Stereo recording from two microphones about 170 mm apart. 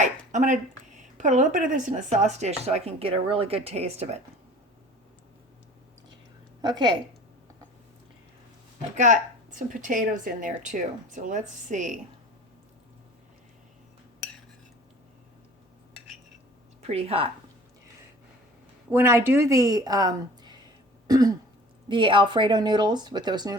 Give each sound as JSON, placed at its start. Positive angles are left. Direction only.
{"t": 0.0, "sound": "a sound", "side_deg": -45}
{"t": 1.2, "sound": "speech", "side_deg": -45}
{"t": 6.6, "sound": "a woman's voice", "side_deg": -25}
{"t": 9.0, "sound": "a woman's voice", "side_deg": -50}
{"t": 16.8, "sound": "speech", "side_deg": -35}
{"t": 18.9, "sound": "a woman's voice", "side_deg": -15}
{"t": 21.1, "sound": "throat clearing", "side_deg": -20}
{"t": 21.8, "sound": "a woman's voice", "side_deg": -30}